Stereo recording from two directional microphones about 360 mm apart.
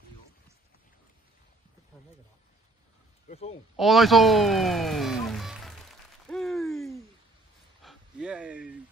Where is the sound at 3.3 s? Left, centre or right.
Centre.